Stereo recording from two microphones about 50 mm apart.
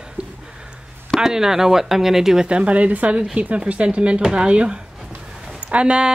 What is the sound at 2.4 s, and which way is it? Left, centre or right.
Speech, right.